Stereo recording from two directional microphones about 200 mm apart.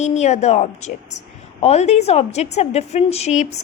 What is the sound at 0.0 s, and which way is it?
A woman's voice, 35° left (ahead or behind).